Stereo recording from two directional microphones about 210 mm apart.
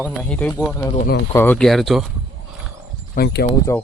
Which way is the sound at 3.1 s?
45° left (ahead or behind).